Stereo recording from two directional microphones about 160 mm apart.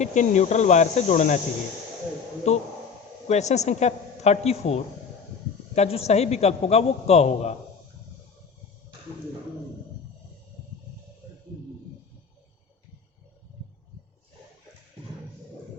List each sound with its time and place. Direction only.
0.0 s speech: 50° left (ahead or behind)
2.5 s a woman's voice: 45° left (ahead or behind)